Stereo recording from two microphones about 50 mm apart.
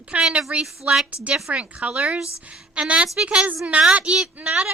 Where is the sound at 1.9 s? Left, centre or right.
Centre.